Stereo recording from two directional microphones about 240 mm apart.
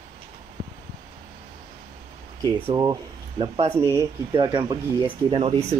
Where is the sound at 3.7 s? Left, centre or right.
Centre.